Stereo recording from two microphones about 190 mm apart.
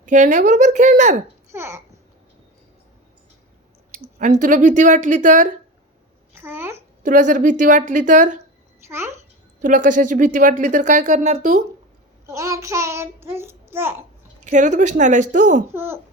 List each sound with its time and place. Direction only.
0.0 s speech: 40° right (ahead or behind)
1.5 s a child's voice: 15° right (ahead or behind)
3.9 s speech: 40° right (ahead or behind)
6.3 s a child's voice: 10° right (ahead or behind)
7.0 s speech: 40° right (ahead or behind)
8.9 s a child's voice: 15° right (ahead or behind)
9.6 s speech: 45° right (ahead or behind)
12.2 s child singing: 15° right (ahead or behind)
14.4 s speech: 40° right (ahead or behind)
15.7 s a child's voice: 10° right (ahead or behind)